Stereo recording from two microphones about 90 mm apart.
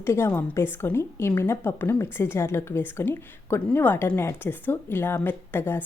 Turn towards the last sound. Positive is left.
turn(degrees=25)  # may be behind; listen again after turning